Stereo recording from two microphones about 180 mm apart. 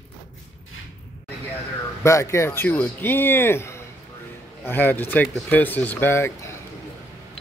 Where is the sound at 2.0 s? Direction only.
15° left (ahead or behind).